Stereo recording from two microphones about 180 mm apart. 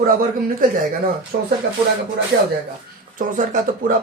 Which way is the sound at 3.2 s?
50° right (ahead or behind).